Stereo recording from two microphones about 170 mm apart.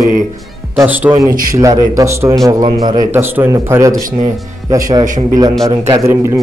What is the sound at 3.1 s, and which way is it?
A man's voice, 10° right (ahead or behind).